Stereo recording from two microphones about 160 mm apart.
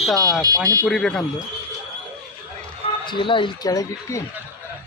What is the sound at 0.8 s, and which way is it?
Speech, 5° left (ahead or behind).